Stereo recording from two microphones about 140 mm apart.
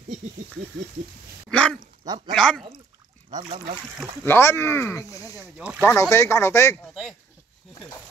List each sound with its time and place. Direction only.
1.5 s a sound: 5° left (ahead or behind)
2.3 s speech: 5° left (ahead or behind)
3.4 s speech: 40° right (ahead or behind)
4.2 s speech: 15° left (ahead or behind)
5.6 s speech: 10° right (ahead or behind)
5.9 s speech: 20° left (ahead or behind)
6.8 s speech: centre (ahead or behind)